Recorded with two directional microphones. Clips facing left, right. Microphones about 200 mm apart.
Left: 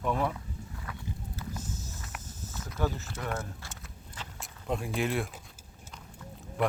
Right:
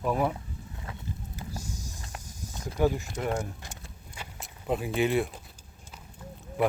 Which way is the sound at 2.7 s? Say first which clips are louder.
Right 7 dB; 15° right (ahead or behind).